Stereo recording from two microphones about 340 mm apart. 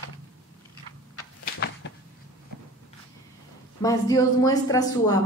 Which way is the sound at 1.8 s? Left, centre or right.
Left.